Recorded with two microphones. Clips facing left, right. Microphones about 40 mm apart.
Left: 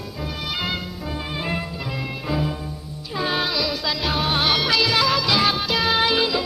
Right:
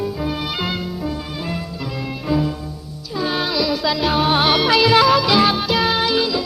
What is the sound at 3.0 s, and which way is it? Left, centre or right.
Music, left.